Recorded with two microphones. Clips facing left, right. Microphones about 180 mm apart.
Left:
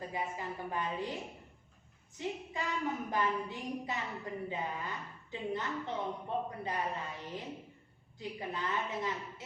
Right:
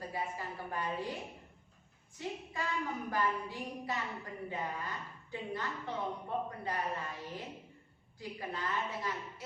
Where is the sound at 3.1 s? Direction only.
20° left (ahead or behind).